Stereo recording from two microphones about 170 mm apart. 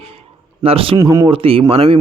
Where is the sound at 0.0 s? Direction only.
35° right (ahead or behind).